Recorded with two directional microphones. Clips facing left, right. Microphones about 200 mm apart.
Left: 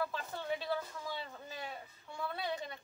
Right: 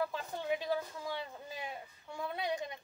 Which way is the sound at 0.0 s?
15° right (ahead or behind).